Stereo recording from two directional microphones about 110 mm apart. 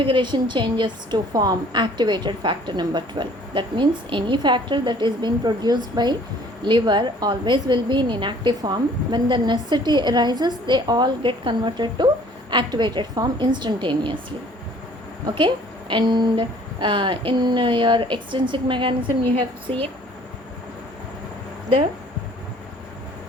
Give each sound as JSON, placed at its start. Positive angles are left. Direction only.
{"t": 0.0, "sound": "a woman's voice", "side_deg": -45}
{"t": 15.4, "sound": "a woman's voice", "side_deg": -45}